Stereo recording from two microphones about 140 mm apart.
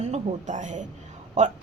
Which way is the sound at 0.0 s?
55° right (ahead or behind).